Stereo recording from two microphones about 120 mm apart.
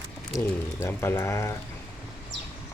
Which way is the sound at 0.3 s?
20° left (ahead or behind).